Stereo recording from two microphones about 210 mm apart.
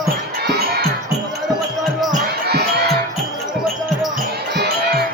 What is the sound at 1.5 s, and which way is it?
Music, centre (ahead or behind).